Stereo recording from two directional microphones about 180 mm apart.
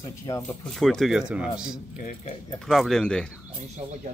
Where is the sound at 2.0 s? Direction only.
45° left (ahead or behind).